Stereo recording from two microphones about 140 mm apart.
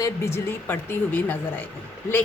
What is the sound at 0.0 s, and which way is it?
A woman's voice, 20° left (ahead or behind).